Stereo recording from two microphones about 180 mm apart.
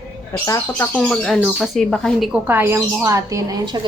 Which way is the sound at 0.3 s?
15° left (ahead or behind).